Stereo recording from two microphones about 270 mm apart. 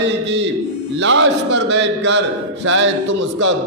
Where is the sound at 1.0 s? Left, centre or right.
Right.